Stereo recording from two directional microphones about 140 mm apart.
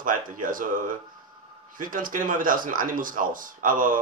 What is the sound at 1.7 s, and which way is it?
Speech, 75° right (ahead or behind).